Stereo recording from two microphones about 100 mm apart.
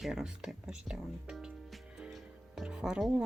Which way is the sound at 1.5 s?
Centre (ahead or behind).